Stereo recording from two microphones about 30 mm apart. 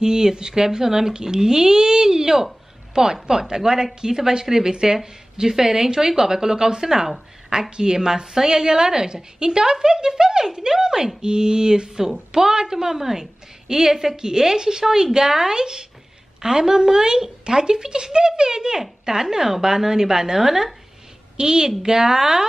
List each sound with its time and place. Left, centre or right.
0.0 s a woman's voice: right